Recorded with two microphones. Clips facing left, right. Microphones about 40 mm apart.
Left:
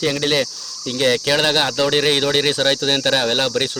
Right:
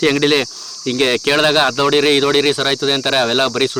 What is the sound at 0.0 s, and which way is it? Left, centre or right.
Speech, right.